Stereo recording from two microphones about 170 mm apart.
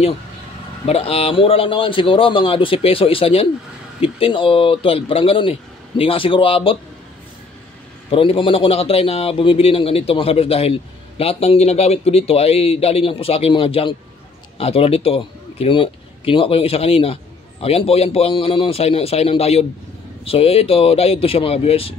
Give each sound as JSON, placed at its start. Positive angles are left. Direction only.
{"t": 0.8, "sound": "a man's voice", "side_deg": 35}
{"t": 8.1, "sound": "a man's voice", "side_deg": 30}